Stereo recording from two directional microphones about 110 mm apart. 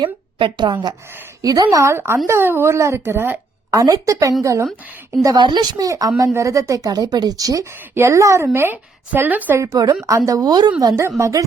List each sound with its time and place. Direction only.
0.0 s a woman's voice: 50° right (ahead or behind); by 3.8 s 20° right (ahead or behind)
3.8 s a woman's voice: 30° right (ahead or behind)
5.2 s speech: 40° right (ahead or behind); by 9.6 s 15° right (ahead or behind)
9.6 s speech: 35° right (ahead or behind)